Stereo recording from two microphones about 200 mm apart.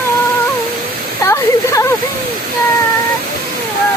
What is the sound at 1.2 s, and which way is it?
Speech, 15° left (ahead or behind).